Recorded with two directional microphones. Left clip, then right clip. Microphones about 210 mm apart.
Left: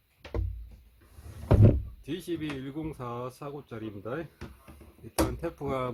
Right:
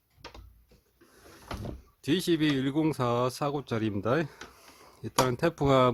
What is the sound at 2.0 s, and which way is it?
Speech, 45° right (ahead or behind).